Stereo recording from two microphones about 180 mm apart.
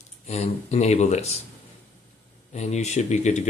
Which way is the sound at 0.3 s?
35° left (ahead or behind).